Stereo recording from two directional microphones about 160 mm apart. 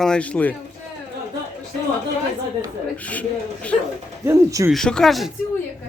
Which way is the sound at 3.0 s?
10° left (ahead or behind).